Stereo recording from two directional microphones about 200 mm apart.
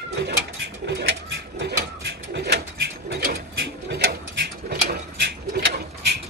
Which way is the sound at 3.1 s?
50° right (ahead or behind).